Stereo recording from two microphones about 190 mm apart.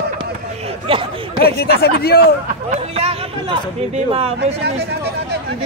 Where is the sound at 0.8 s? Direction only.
30° right (ahead or behind).